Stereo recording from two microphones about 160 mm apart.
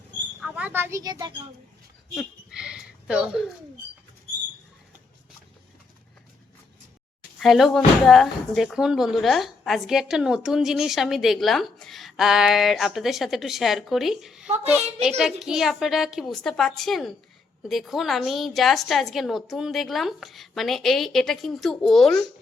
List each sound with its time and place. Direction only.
0.4 s speech: 10° right (ahead or behind); by 1.4 s 25° right (ahead or behind)
2.1 s a sound: 5° right (ahead or behind)
7.3 s a woman's voice: centre (ahead or behind)